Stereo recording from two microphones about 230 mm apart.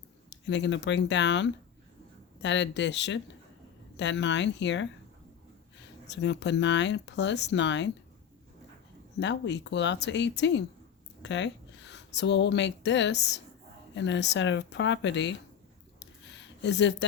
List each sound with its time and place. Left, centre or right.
0.3 s speech: left
6.1 s speech: left
9.2 s speech: left
16.0 s a sound: left